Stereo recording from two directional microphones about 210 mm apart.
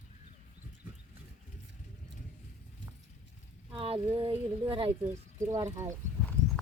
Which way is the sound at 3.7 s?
25° right (ahead or behind).